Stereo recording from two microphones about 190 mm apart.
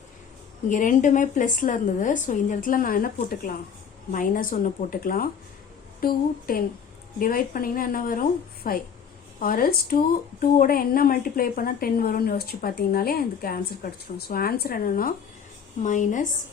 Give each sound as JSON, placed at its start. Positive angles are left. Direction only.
{"t": 0.7, "sound": "a woman's voice", "side_deg": 40}